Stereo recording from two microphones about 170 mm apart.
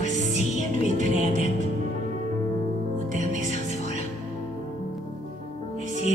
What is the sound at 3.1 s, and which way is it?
Music, 50° right (ahead or behind).